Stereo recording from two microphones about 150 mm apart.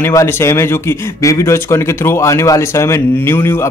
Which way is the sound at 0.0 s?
20° left (ahead or behind).